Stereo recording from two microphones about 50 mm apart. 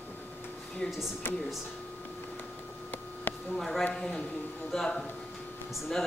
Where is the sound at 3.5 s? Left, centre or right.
Centre.